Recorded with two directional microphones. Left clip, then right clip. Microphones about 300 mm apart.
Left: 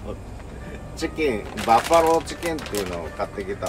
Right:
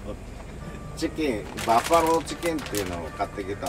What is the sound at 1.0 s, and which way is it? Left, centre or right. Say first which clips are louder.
Speech: left 3 dB; centre.